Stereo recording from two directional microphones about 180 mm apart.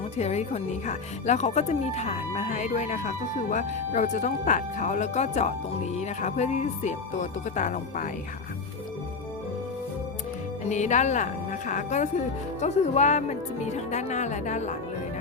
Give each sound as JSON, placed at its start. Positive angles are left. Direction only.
{"t": 0.2, "sound": "speech", "side_deg": 40}
{"t": 10.6, "sound": "speech", "side_deg": 40}